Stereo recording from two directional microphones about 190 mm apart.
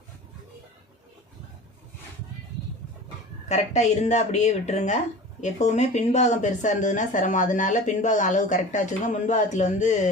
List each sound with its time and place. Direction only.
3.5 s speech: 35° left (ahead or behind)